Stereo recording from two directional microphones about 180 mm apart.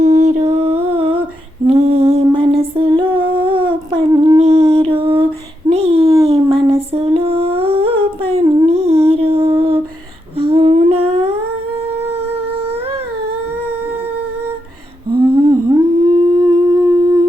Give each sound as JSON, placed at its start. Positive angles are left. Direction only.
{"t": 0.0, "sound": "music", "side_deg": -40}
{"t": 1.6, "sound": "female singing", "side_deg": -35}
{"t": 3.2, "sound": "a sound", "side_deg": -30}
{"t": 4.2, "sound": "humming", "side_deg": -30}
{"t": 4.7, "sound": "a sound", "side_deg": -30}
{"t": 6.2, "sound": "humming", "side_deg": -30}
{"t": 15.3, "sound": "humming", "side_deg": -25}